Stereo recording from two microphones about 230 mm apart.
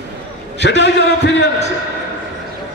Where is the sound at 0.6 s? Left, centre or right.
Left.